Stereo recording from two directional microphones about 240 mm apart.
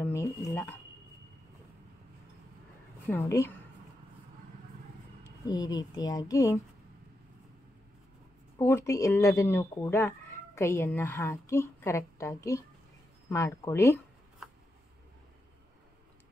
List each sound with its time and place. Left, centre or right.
0.0 s a sound: centre
3.1 s speech: centre
5.5 s speech: centre
8.5 s speech: centre